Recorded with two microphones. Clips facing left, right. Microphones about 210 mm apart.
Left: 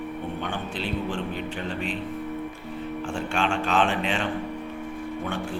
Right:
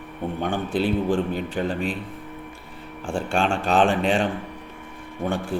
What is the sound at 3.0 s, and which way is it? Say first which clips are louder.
A man's voice: right 4 dB; 30° right (ahead or behind).